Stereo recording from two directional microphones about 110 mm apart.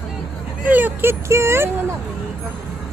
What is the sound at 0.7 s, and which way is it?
Speech, 15° right (ahead or behind).